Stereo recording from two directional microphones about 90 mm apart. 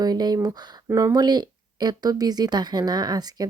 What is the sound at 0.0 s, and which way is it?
Speech, 45° right (ahead or behind).